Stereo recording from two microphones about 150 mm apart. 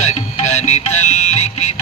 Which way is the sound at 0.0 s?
50° left (ahead or behind).